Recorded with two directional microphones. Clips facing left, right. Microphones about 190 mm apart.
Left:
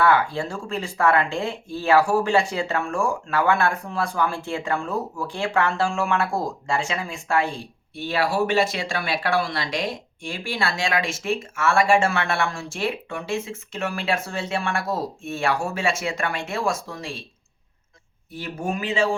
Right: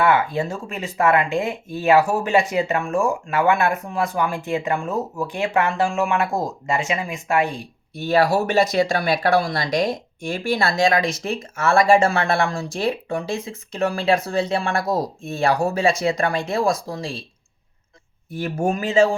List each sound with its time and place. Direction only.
0.0 s speech: 20° right (ahead or behind)
7.9 s speech: 40° right (ahead or behind)
18.3 s speech: 45° right (ahead or behind)